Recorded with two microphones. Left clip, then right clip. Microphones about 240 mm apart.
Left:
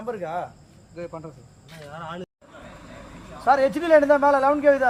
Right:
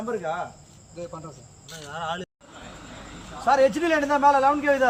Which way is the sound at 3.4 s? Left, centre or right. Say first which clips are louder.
Even; centre.